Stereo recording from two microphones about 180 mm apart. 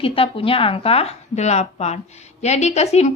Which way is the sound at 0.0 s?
30° left (ahead or behind).